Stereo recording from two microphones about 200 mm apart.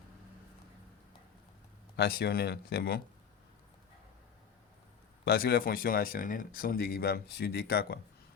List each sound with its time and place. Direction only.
2.0 s speech: 50° left (ahead or behind)
5.2 s speech: 50° left (ahead or behind)